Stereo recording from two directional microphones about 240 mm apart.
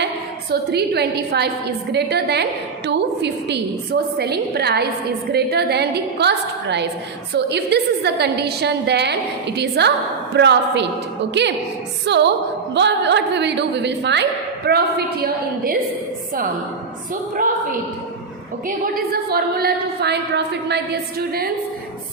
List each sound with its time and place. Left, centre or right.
0.5 s a woman's voice: right
12.0 s a woman's voice: right
17.3 s a woman's voice: right
18.9 s a woman's voice: right